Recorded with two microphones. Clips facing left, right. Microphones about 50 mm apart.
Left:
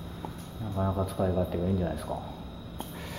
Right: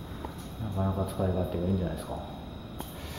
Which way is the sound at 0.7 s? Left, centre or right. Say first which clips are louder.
Left 1 dB; centre.